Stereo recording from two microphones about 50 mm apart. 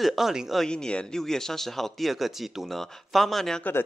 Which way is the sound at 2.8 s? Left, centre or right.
Centre.